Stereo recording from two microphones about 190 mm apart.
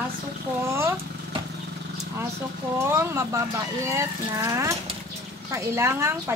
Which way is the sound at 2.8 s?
15° right (ahead or behind).